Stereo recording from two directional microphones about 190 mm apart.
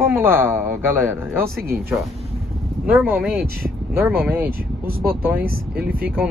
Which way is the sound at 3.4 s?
55° right (ahead or behind).